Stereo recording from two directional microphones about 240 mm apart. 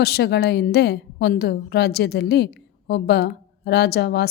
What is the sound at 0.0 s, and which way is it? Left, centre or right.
A woman's voice, left.